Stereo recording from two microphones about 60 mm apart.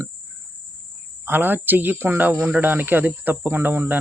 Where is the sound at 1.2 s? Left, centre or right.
Right.